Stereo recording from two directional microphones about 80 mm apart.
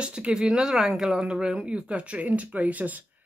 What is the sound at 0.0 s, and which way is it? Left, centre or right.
Speech, centre.